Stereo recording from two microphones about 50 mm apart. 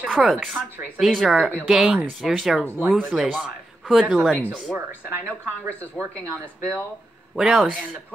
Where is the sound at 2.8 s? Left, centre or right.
Right.